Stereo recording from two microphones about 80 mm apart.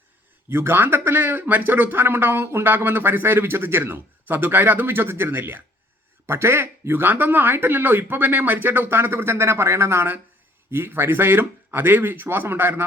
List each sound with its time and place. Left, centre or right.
0.5 s speech: right